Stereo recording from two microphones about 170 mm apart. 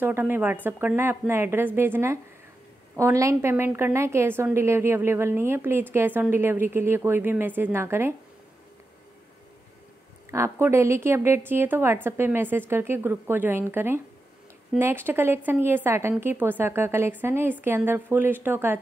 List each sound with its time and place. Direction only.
0.0 s a woman's voice: 10° right (ahead or behind)
10.3 s a woman's voice: 15° right (ahead or behind)